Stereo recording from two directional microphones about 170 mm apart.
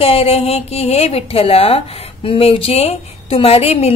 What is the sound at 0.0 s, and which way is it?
A woman's voice, 35° left (ahead or behind).